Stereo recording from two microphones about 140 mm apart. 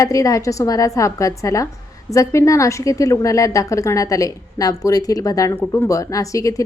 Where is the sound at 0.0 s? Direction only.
25° left (ahead or behind).